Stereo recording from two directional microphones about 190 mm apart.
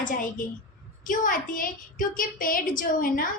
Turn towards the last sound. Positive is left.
turn(degrees=50)  # may be behind; listen again after turning